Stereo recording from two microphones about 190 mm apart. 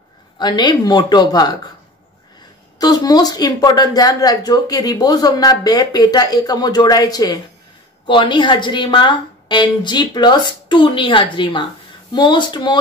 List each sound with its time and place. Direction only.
0.4 s speech: 25° left (ahead or behind)
2.8 s speech: 20° left (ahead or behind)